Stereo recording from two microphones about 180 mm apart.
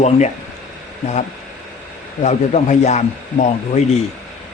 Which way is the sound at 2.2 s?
40° left (ahead or behind).